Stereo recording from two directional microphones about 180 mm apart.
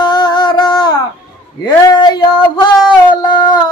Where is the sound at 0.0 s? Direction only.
25° left (ahead or behind).